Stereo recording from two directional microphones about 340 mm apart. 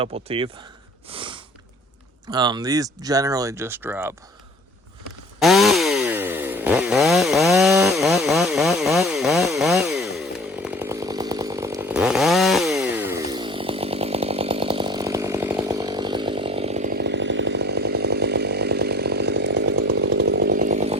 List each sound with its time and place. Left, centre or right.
0.0 s speech: centre
1.1 s snort: centre
2.3 s speech: centre
5.4 s chainsaw: centre; by 20.9 s right